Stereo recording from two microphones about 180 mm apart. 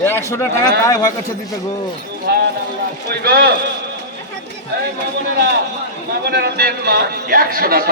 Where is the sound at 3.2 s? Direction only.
60° right (ahead or behind).